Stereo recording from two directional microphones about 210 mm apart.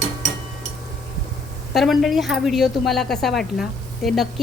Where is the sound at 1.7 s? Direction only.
Centre (ahead or behind).